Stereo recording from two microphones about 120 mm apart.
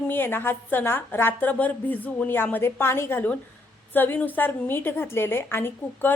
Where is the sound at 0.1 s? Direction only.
15° left (ahead or behind).